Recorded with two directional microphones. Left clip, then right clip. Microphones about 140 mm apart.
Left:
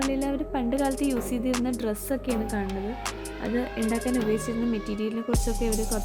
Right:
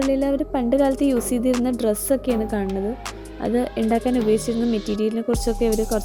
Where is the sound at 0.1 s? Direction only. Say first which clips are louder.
Right 7 dB; 35° right (ahead or behind).